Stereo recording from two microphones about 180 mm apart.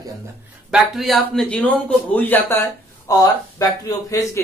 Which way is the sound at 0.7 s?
Centre (ahead or behind).